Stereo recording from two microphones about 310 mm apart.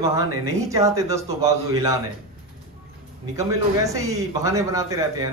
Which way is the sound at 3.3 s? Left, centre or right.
Centre.